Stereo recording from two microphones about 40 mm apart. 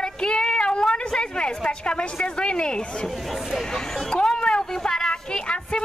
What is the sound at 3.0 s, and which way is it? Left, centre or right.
Speech, centre.